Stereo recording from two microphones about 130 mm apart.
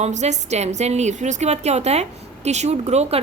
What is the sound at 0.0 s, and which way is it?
A woman's voice, 60° right (ahead or behind).